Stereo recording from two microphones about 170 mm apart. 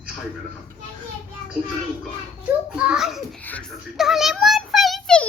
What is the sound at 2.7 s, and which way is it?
Speech, 5° right (ahead or behind).